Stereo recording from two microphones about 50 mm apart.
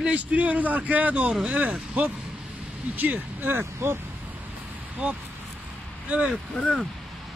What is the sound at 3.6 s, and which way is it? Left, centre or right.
Speech, right.